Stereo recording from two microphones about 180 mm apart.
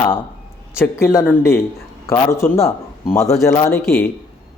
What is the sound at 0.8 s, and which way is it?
Speech, 15° left (ahead or behind).